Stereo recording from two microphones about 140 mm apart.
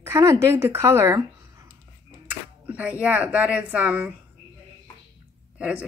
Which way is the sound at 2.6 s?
10° right (ahead or behind).